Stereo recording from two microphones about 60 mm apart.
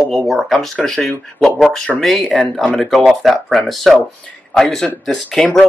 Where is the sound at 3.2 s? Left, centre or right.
Centre.